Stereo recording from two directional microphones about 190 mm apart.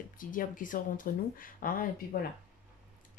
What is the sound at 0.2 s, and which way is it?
Speech, 45° left (ahead or behind).